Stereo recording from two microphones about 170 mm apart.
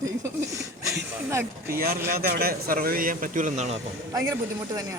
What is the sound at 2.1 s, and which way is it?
A man's voice, 60° right (ahead or behind).